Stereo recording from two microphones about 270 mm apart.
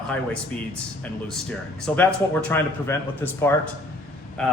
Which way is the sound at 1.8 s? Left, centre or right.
Centre.